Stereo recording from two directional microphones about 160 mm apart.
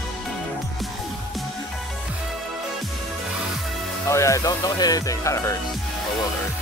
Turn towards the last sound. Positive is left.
turn(degrees=20)  # may be behind; listen again after turning